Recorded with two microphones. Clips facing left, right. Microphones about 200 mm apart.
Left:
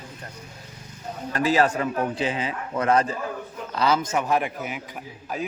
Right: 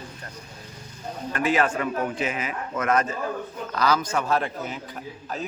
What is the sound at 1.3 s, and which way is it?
A man's voice, 35° left (ahead or behind).